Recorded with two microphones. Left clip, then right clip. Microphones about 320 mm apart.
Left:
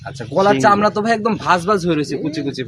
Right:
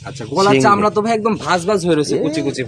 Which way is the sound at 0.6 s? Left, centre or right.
Centre.